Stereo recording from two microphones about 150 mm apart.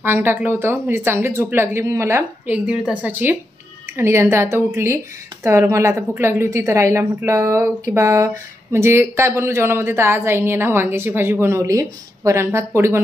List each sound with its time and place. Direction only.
0.0 s speech: 15° right (ahead or behind)